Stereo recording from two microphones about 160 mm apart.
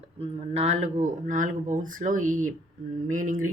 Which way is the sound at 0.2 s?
40° right (ahead or behind).